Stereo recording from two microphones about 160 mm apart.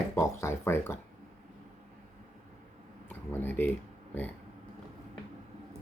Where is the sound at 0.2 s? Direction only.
15° left (ahead or behind).